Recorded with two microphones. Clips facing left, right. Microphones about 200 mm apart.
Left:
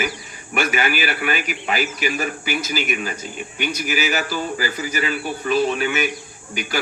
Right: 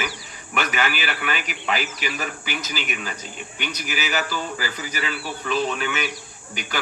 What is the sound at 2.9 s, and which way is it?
Speech, 50° left (ahead or behind).